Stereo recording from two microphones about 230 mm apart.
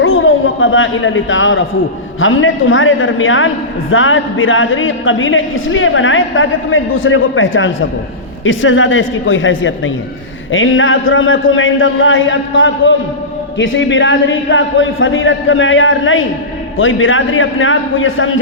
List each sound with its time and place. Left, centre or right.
0.0 s a woman's voice: left